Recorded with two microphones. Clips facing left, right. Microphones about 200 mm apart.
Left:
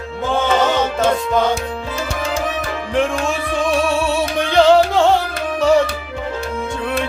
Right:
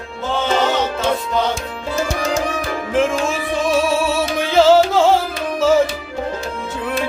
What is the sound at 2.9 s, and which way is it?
Music, centre (ahead or behind).